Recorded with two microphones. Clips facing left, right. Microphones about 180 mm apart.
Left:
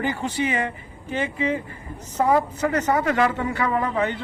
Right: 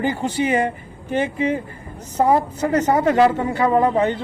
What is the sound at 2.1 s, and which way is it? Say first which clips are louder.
A man's voice: right 3 dB; 30° right (ahead or behind).